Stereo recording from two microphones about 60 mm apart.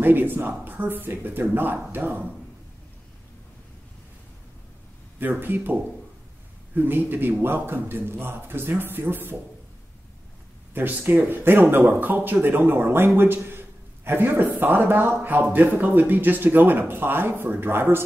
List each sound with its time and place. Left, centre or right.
0.0 s speech: right
5.2 s speech: right
10.7 s speech: right